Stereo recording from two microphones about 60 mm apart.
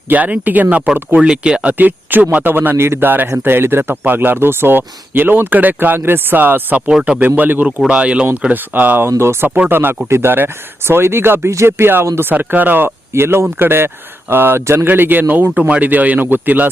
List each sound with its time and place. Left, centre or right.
0.1 s a man's voice: right
1.8 s speech: right
7.9 s a man's voice: centre
9.0 s speech: right
9.6 s a man's voice: right